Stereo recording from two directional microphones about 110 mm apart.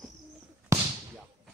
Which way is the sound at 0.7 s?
30° right (ahead or behind).